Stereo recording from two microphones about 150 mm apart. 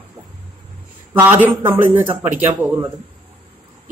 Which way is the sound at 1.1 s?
15° right (ahead or behind).